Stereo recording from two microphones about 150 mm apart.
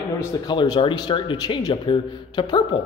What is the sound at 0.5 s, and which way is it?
A man's voice, 30° left (ahead or behind).